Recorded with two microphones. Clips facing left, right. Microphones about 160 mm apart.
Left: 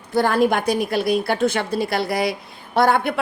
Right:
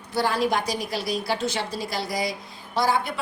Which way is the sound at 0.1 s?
50° left (ahead or behind).